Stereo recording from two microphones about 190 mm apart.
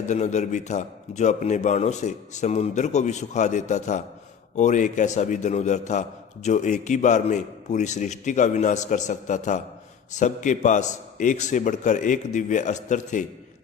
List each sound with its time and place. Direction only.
0.1 s a man's voice: 40° left (ahead or behind)